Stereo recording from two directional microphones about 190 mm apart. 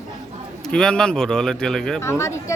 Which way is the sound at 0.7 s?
5° left (ahead or behind).